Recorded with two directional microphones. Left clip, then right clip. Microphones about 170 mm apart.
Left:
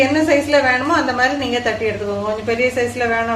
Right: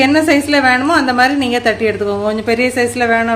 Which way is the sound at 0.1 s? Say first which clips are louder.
Right 2 dB; 65° right (ahead or behind).